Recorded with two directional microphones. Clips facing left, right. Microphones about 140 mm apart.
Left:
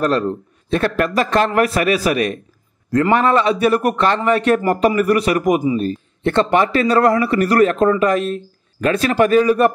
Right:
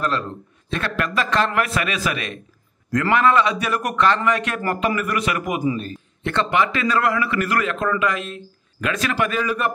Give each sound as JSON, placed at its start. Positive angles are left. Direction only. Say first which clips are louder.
{"t": 0.0, "sound": "a man's voice", "louder": "left 7 dB", "side_deg": 40}